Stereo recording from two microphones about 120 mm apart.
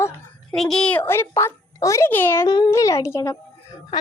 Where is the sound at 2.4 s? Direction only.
35° left (ahead or behind).